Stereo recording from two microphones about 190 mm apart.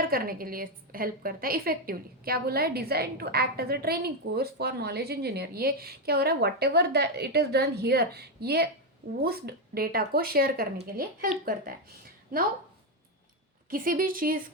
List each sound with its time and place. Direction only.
0.0 s a woman's voice: 50° right (ahead or behind)
13.7 s speech: 50° right (ahead or behind)